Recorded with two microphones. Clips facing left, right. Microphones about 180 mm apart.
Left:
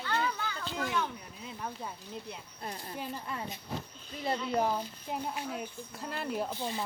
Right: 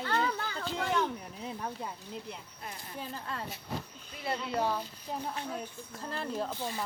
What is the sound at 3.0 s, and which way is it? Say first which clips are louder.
Speech: even; 10° left (ahead or behind).